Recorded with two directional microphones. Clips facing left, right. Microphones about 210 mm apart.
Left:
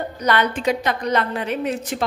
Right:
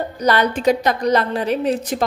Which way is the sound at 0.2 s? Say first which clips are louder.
Right 3 dB; 35° right (ahead or behind).